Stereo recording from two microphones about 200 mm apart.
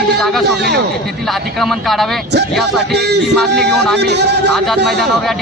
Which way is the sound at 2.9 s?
55° right (ahead or behind).